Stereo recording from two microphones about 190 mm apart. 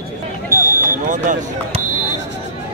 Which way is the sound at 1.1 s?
40° right (ahead or behind).